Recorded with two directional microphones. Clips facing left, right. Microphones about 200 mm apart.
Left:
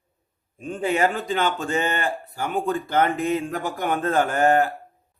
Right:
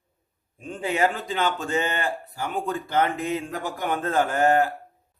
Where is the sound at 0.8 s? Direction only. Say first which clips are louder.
Left 2 dB; 50° left (ahead or behind).